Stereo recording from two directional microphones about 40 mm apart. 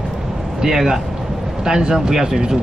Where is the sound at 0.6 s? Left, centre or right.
Centre.